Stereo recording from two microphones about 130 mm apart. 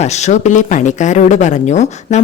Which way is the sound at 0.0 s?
60° left (ahead or behind).